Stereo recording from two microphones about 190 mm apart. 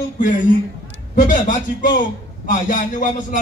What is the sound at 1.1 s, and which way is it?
A man's voice, 45° left (ahead or behind).